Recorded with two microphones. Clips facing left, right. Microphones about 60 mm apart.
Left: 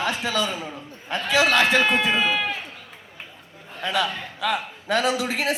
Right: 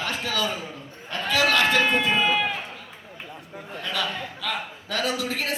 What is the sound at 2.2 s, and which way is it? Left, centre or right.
Run, centre.